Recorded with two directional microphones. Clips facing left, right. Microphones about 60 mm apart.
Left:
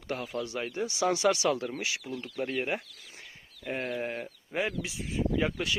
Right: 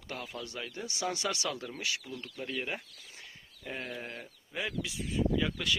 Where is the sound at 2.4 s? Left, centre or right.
Left.